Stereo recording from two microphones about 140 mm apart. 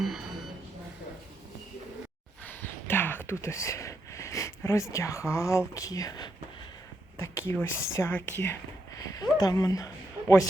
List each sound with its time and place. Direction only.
2.4 s a sound: 15° left (ahead or behind)
7.2 s speech: 15° left (ahead or behind)
9.0 s speech: 25° left (ahead or behind)